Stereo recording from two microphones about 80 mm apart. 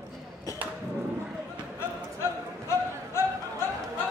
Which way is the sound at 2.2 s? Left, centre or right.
Left.